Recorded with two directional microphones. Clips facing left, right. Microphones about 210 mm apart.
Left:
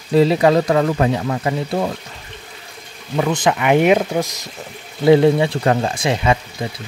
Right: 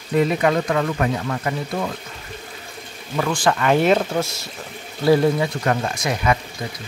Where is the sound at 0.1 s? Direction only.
30° left (ahead or behind).